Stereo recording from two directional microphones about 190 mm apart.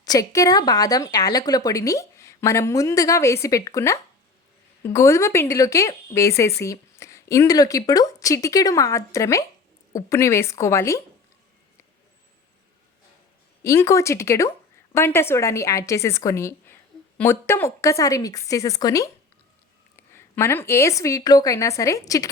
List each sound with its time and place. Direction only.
0.0 s speech: 20° left (ahead or behind)
13.6 s speech: 15° left (ahead or behind)